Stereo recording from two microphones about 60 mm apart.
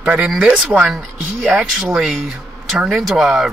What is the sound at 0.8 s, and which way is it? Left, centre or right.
Speech, centre.